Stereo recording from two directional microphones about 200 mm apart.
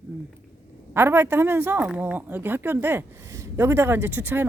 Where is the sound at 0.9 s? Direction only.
10° right (ahead or behind).